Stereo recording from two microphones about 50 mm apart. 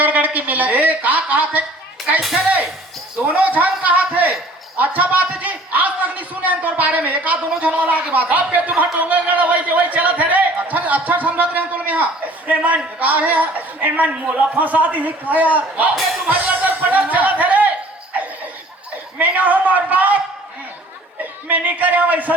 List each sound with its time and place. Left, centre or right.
0.0 s a woman's voice: right
2.3 s music: right
3.2 s a man's voice: right
4.8 s a sound: right
13.0 s a man's voice: right
19.2 s a man's voice: right
21.4 s a man's voice: right